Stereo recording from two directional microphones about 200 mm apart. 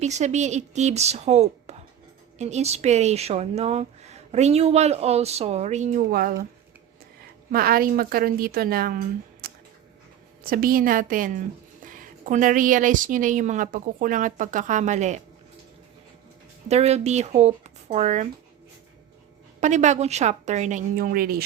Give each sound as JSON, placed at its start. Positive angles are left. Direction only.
{"t": 0.0, "sound": "a woman's voice", "side_deg": -35}
{"t": 7.5, "sound": "a woman's voice", "side_deg": -45}
{"t": 16.6, "sound": "a woman's voice", "side_deg": -30}
{"t": 19.5, "sound": "a woman's voice", "side_deg": -35}